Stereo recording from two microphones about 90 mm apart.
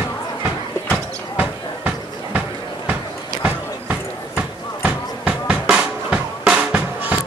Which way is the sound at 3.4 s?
20° right (ahead or behind).